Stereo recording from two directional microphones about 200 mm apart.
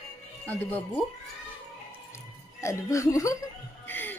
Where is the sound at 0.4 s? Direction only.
10° left (ahead or behind).